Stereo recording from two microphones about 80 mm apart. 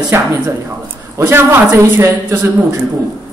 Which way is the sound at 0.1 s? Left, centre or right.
Right.